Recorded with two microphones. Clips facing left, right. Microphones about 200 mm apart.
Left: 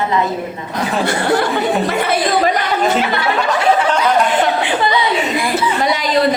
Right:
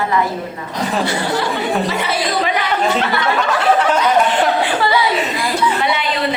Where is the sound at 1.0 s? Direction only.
55° left (ahead or behind).